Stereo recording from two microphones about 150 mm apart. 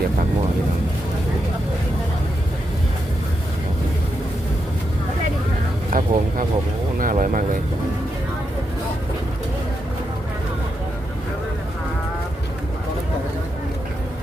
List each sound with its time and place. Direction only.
5.9 s speech: 60° right (ahead or behind)